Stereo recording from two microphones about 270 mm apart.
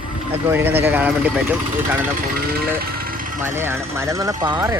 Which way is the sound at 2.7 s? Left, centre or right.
Right.